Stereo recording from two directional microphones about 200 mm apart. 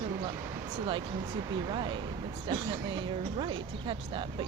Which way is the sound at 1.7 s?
25° right (ahead or behind).